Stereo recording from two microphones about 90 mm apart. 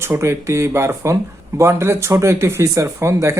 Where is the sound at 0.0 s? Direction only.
30° right (ahead or behind).